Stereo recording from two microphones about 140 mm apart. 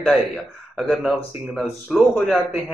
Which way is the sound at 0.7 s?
Centre (ahead or behind).